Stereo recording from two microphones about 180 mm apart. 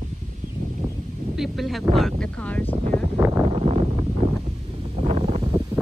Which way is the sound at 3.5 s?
35° right (ahead or behind).